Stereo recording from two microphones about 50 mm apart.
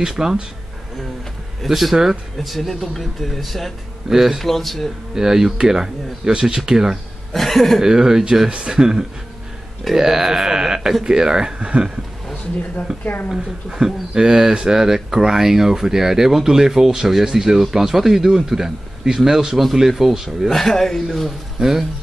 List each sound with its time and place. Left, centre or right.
0.0 s speech: centre
1.7 s speech: centre
4.1 s speech: centre
4.4 s speech: centre
5.1 s speech: centre
7.3 s speech: centre
7.8 s speech: centre
13.0 s speech: left
13.4 s speech: centre
20.4 s speech: centre
21.5 s speech: centre